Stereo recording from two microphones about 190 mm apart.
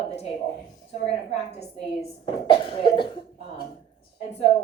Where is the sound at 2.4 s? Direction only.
25° left (ahead or behind).